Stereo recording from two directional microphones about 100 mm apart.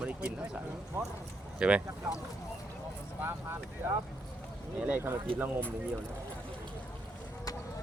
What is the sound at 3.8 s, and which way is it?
Speech, 20° right (ahead or behind).